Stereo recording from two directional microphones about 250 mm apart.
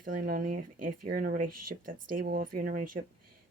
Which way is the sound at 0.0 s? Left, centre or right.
Right.